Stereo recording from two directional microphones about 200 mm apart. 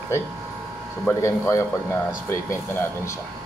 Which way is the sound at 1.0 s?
10° left (ahead or behind).